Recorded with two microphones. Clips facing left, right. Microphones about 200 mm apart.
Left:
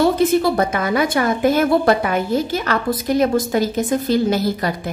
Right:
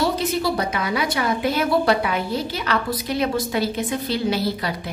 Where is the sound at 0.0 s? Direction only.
50° left (ahead or behind).